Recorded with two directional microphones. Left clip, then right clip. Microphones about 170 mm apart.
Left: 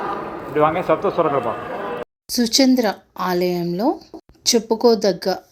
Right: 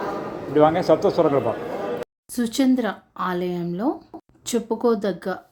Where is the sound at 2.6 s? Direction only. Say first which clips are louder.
Left 4 dB; 10° left (ahead or behind).